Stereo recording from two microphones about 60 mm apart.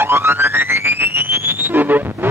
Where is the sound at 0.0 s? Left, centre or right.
Right.